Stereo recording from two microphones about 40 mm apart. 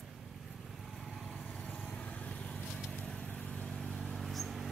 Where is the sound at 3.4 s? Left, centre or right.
Left.